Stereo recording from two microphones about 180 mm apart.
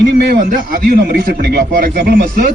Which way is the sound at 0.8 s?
55° right (ahead or behind).